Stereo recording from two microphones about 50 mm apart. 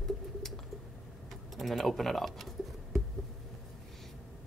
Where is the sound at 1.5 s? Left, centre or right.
Centre.